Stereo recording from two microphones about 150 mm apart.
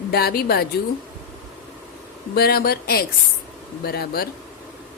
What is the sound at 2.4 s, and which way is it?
A woman's voice, 90° left.